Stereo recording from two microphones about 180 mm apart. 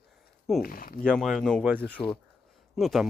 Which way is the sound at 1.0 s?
5° left (ahead or behind).